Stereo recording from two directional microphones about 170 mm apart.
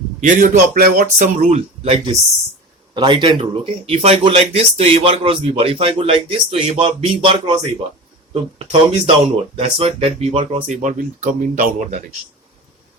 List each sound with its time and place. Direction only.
0.2 s speech: 50° right (ahead or behind)